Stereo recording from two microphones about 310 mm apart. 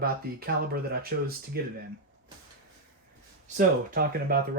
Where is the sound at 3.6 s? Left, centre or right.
Right.